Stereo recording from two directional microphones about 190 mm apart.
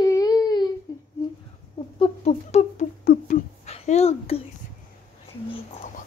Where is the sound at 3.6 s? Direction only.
35° left (ahead or behind).